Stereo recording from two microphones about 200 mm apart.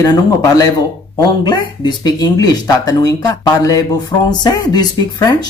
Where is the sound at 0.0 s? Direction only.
20° left (ahead or behind).